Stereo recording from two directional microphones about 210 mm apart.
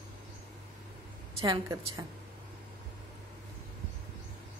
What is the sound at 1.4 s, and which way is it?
Speech, 20° right (ahead or behind).